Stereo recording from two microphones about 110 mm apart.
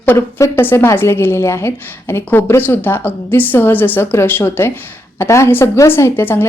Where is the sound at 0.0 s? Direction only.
15° left (ahead or behind).